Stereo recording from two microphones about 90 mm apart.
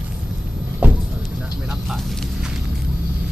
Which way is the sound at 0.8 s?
15° right (ahead or behind).